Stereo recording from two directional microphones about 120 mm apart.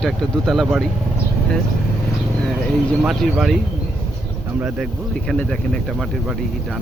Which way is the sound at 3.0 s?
Centre (ahead or behind).